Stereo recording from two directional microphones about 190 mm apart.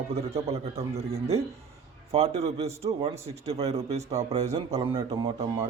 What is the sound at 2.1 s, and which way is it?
A man's voice, 30° right (ahead or behind).